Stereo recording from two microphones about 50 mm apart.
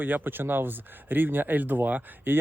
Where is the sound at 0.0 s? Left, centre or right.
Right.